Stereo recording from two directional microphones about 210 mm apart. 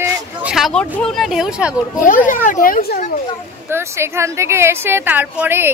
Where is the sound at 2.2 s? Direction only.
40° left (ahead or behind).